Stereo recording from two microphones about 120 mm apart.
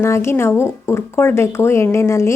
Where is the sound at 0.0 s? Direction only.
20° left (ahead or behind).